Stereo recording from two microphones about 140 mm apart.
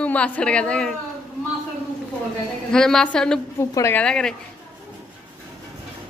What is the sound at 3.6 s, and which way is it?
Speech, 20° left (ahead or behind).